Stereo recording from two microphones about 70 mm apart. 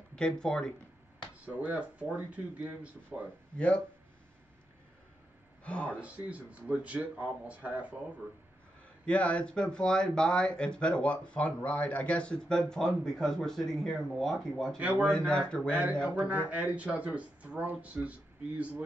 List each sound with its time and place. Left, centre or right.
0.1 s speech: centre
1.7 s speech: right
3.5 s speech: centre
5.6 s speech: centre
5.9 s speech: centre
9.0 s speech: centre
14.8 s speech: right
15.0 s speech: centre
16.3 s speech: right